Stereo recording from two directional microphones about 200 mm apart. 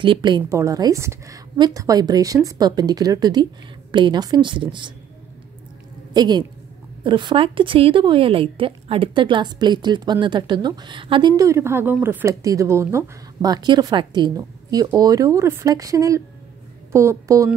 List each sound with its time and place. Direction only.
0.0 s a woman's voice: 25° right (ahead or behind)
6.1 s a woman's voice: 20° right (ahead or behind)